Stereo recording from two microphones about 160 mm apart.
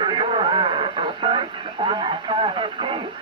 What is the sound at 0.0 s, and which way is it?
Radio, 30° right (ahead or behind).